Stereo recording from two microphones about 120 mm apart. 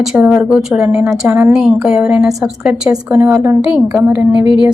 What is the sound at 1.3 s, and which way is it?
A woman's voice, 15° right (ahead or behind).